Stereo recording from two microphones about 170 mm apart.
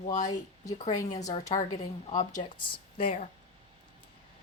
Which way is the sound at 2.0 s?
45° left (ahead or behind).